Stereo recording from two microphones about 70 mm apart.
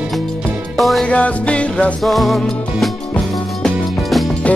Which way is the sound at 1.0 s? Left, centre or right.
Centre.